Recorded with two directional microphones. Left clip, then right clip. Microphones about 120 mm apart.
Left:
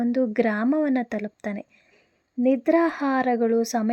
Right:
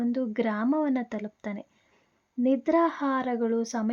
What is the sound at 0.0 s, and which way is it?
Speech, 30° left (ahead or behind).